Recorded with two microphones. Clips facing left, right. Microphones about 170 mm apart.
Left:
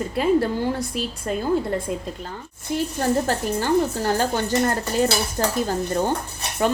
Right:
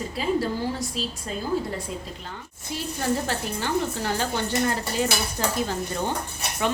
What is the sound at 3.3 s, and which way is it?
Cutlery, 45° left (ahead or behind).